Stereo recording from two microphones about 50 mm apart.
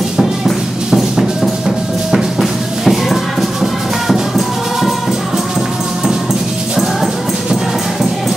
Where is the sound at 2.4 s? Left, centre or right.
Centre.